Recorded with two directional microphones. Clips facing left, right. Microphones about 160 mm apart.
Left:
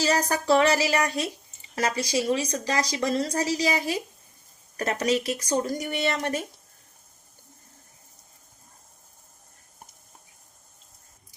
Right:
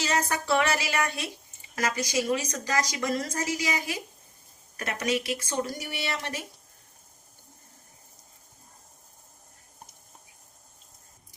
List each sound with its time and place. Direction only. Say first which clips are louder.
0.0 s speech: left 4 dB; 35° left (ahead or behind)